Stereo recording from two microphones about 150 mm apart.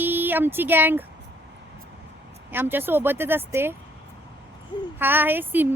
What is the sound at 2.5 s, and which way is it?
Speech, 15° right (ahead or behind).